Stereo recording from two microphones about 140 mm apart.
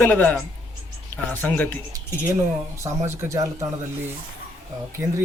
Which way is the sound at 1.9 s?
20° right (ahead or behind).